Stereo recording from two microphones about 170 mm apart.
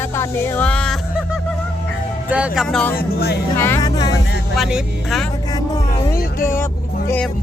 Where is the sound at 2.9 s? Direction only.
65° left (ahead or behind).